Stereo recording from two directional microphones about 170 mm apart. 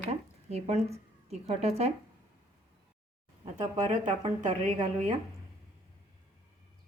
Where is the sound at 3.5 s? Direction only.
45° right (ahead or behind).